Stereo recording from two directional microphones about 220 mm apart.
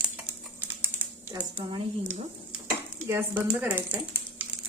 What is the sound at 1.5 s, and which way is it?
Speech, 25° right (ahead or behind).